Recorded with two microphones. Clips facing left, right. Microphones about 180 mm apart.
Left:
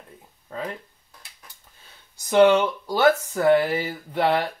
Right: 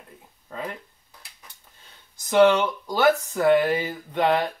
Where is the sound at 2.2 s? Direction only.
15° left (ahead or behind).